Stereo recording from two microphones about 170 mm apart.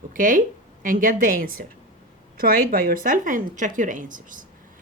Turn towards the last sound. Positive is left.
turn(degrees=-50)  # may be behind; listen again after turning